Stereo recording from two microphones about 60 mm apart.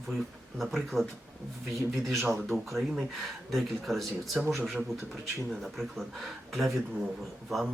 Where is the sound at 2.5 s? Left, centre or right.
Left.